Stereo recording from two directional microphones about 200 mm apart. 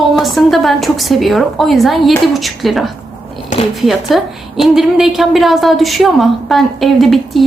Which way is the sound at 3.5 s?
35° left (ahead or behind).